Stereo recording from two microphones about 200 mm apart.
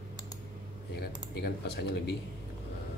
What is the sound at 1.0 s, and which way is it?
Speech, 55° left (ahead or behind).